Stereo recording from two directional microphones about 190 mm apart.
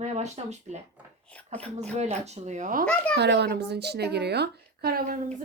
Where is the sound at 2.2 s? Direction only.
35° right (ahead or behind).